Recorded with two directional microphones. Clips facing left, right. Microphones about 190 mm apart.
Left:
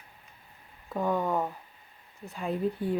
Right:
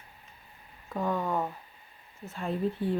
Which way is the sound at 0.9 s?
5° left (ahead or behind).